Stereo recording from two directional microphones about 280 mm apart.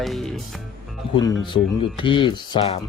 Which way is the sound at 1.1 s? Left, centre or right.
Centre.